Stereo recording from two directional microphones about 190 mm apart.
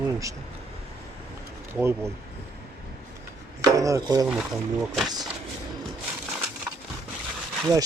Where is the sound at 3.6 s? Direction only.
15° right (ahead or behind).